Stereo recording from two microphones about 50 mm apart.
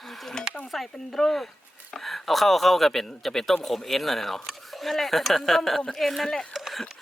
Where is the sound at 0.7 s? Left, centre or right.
Centre.